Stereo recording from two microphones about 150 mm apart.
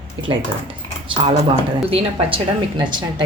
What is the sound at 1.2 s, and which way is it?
Speech, 35° right (ahead or behind).